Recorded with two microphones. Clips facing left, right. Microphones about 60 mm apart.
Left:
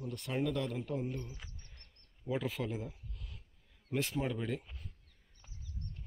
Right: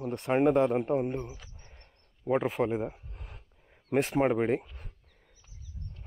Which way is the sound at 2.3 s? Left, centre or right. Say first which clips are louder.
Right 9 dB; right.